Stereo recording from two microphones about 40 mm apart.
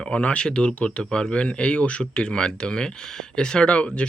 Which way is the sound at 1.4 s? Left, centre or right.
Left.